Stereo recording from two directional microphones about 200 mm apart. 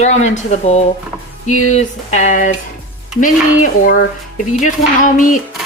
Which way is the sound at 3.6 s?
40° left (ahead or behind).